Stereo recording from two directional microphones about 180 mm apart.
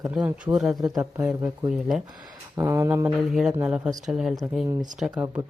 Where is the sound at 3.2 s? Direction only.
Centre (ahead or behind).